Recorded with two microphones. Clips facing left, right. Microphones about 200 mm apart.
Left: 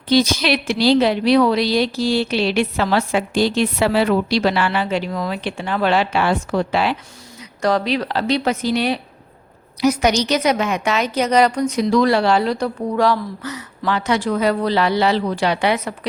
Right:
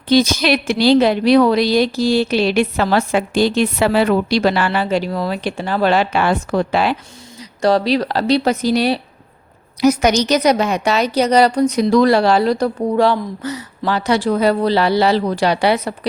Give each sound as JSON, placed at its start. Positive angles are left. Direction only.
{"t": 0.1, "sound": "a woman's voice", "side_deg": -50}
{"t": 7.6, "sound": "a woman's voice", "side_deg": -35}